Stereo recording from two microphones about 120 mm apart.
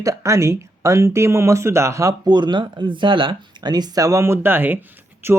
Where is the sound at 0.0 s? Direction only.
25° right (ahead or behind).